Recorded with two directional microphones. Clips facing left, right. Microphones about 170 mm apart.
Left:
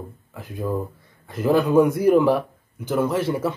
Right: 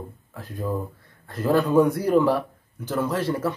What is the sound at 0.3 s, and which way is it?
A man's voice, 10° left (ahead or behind).